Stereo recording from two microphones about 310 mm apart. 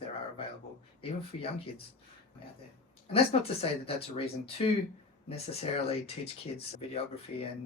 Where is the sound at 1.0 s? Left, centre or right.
Centre.